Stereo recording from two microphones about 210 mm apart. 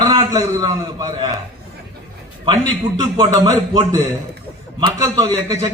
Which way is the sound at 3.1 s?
20° right (ahead or behind).